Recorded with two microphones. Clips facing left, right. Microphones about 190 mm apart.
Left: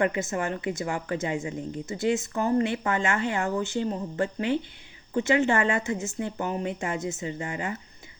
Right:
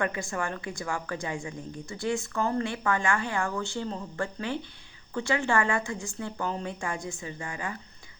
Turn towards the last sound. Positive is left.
turn(degrees=20)  # may be behind; listen again after turning